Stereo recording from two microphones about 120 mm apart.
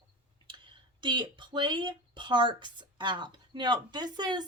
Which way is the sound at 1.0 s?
40° right (ahead or behind).